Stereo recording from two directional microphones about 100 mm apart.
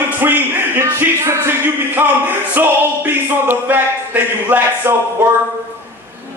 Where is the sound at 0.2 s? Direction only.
20° right (ahead or behind).